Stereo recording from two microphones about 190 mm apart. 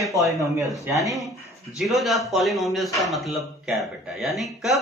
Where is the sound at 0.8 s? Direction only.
15° right (ahead or behind).